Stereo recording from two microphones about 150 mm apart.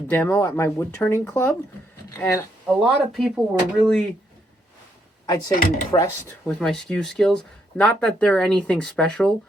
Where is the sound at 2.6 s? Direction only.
Centre (ahead or behind).